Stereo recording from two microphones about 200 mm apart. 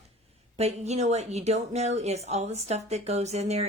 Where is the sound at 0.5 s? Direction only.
35° right (ahead or behind).